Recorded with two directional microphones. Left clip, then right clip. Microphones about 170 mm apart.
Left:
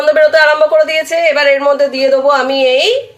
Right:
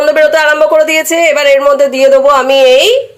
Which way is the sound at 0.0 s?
20° right (ahead or behind).